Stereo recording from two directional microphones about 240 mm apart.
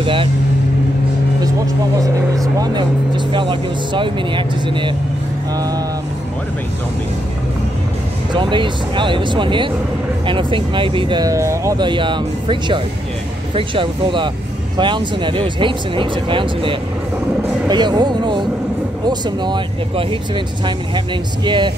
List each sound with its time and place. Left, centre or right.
0.0 s speech: right
2.0 s speech: centre
8.3 s speech: centre